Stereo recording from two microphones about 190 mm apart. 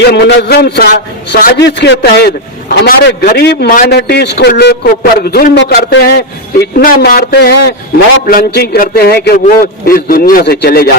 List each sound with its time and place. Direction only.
0.0 s a man's voice: 60° left (ahead or behind)